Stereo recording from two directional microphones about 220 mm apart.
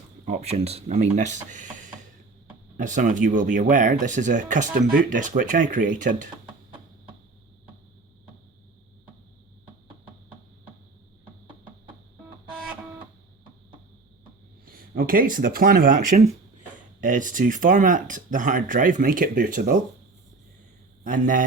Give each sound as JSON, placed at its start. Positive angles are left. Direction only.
{"t": 0.3, "sound": "speech", "side_deg": -30}
{"t": 14.6, "sound": "speech", "side_deg": -40}
{"t": 21.0, "sound": "speech", "side_deg": -35}